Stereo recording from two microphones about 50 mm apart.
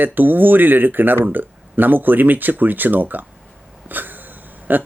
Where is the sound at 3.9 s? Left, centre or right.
Right.